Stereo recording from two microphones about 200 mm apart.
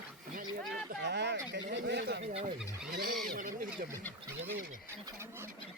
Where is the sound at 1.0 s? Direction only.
60° right (ahead or behind).